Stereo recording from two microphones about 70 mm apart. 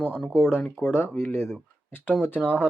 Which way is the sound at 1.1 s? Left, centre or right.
Left.